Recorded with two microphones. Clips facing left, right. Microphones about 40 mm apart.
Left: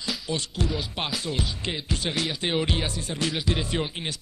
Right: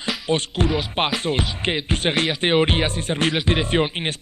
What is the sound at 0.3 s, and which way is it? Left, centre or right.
Speech, right.